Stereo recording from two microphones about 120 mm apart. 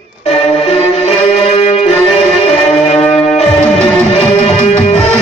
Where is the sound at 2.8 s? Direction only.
60° left (ahead or behind).